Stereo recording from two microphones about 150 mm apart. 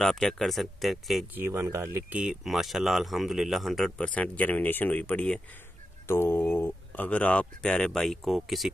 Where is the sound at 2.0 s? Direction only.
5° right (ahead or behind).